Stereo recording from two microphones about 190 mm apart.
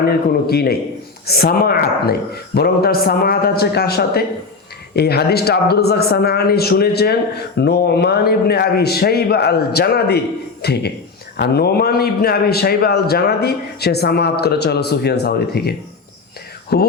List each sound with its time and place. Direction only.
0.0 s a man's voice: 55° left (ahead or behind)